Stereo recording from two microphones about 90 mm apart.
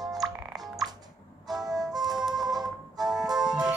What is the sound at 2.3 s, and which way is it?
Music, 45° right (ahead or behind).